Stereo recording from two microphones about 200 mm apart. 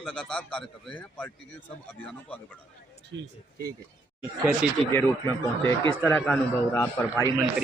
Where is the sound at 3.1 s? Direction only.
50° right (ahead or behind).